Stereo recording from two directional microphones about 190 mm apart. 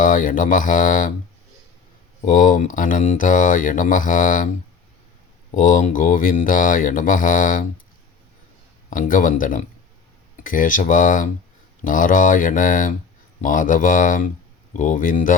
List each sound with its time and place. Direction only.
0.0 s speech: 45° left (ahead or behind)
2.3 s speech: 45° left (ahead or behind)
5.5 s speech: 45° left (ahead or behind)
8.9 s speech: 45° left (ahead or behind)